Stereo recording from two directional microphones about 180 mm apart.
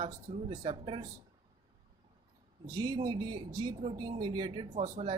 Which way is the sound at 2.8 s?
20° right (ahead or behind).